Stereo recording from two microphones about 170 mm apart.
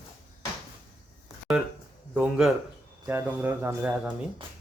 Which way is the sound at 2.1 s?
5° right (ahead or behind).